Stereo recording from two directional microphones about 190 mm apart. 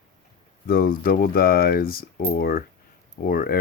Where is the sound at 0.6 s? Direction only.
50° left (ahead or behind).